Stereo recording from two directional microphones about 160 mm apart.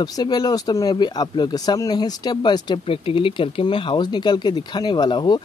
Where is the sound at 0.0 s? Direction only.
25° left (ahead or behind).